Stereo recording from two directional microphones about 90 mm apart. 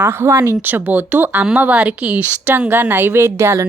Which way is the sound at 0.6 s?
20° right (ahead or behind).